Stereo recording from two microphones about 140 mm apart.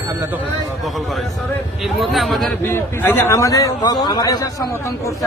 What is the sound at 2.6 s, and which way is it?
A man's voice, 15° left (ahead or behind).